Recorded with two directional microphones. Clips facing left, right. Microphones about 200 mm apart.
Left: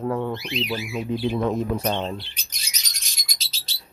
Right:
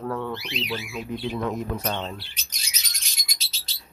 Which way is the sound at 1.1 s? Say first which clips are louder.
Left 5 dB; 30° left (ahead or behind).